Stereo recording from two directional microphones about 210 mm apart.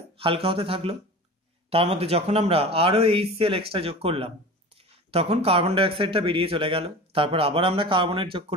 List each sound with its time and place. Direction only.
0.2 s speech: 25° right (ahead or behind)